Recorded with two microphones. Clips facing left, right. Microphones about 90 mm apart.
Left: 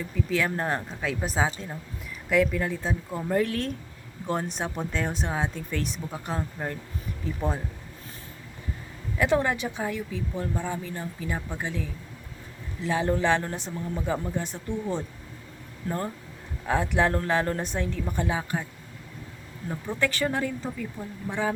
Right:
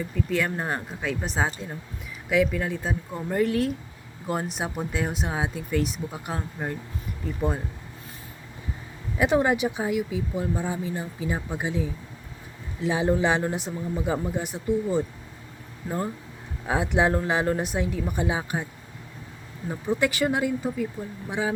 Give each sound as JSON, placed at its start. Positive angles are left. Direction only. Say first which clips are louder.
{"t": 0.0, "sound": "speech", "louder": "right 1 dB", "side_deg": 0}
{"t": 9.1, "sound": "speech", "louder": "right 2 dB", "side_deg": -20}
{"t": 19.6, "sound": "speech", "louder": "right 3 dB", "side_deg": -15}